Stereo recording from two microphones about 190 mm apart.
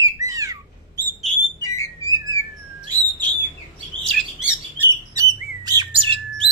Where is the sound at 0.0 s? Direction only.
15° right (ahead or behind).